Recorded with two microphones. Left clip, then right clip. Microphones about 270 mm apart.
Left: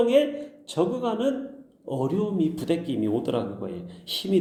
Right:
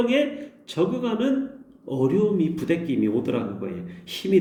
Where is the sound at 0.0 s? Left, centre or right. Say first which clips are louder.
Left 2 dB; centre.